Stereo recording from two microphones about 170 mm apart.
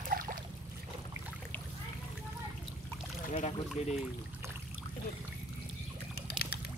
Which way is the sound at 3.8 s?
40° left (ahead or behind).